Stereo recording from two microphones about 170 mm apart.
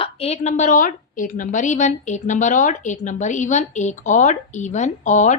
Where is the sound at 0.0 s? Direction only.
35° left (ahead or behind).